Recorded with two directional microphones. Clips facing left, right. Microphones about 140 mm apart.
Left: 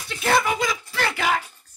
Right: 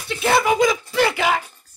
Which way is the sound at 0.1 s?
5° right (ahead or behind).